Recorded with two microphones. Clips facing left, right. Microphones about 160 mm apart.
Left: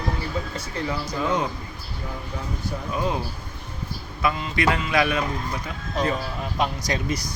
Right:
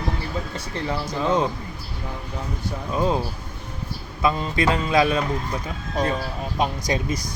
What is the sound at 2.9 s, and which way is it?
Mantra, 30° right (ahead or behind).